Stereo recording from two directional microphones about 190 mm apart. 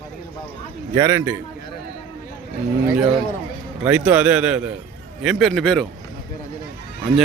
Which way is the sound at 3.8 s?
5° right (ahead or behind).